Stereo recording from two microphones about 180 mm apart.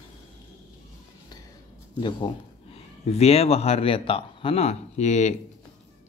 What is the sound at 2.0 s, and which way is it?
Speech, 25° left (ahead or behind).